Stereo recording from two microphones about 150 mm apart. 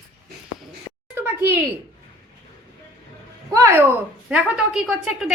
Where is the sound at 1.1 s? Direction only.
15° right (ahead or behind).